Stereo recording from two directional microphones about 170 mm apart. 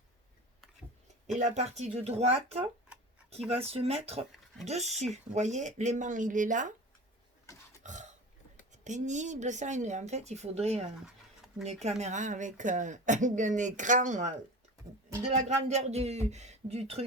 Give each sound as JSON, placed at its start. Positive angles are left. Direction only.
{"t": 1.4, "sound": "speech", "side_deg": -40}
{"t": 7.5, "sound": "burping", "side_deg": 20}
{"t": 7.9, "sound": "burping", "side_deg": -45}
{"t": 8.7, "sound": "speech", "side_deg": -45}